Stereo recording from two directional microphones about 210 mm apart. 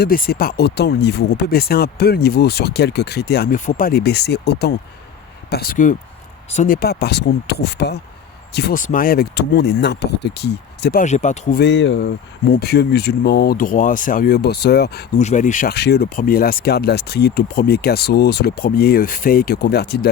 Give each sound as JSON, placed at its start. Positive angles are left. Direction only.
{"t": 0.0, "sound": "speech", "side_deg": 45}
{"t": 6.7, "sound": "speech", "side_deg": 50}
{"t": 11.0, "sound": "speech", "side_deg": 35}
{"t": 11.6, "sound": "speech", "side_deg": 60}
{"t": 15.2, "sound": "speech", "side_deg": 35}